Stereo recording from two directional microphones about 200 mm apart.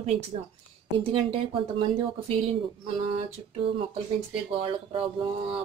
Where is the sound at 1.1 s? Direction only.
25° right (ahead or behind).